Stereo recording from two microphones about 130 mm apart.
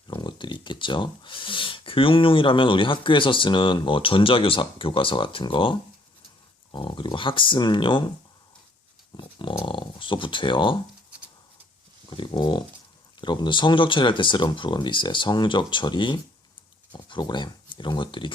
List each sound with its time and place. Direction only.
0.1 s speech: 35° left (ahead or behind)
9.1 s speech: 40° left (ahead or behind)
12.1 s speech: 35° left (ahead or behind)